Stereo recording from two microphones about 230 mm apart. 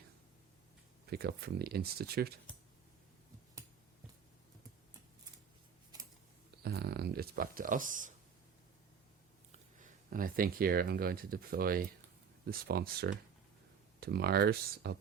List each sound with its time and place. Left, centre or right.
1.1 s speech: right
6.6 s a sound: right
9.5 s speech: right